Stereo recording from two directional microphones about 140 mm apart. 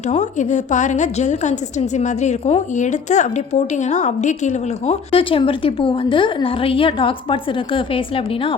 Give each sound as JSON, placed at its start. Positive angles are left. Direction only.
{"t": 0.1, "sound": "a woman's voice", "side_deg": 60}
{"t": 5.1, "sound": "a woman's voice", "side_deg": 40}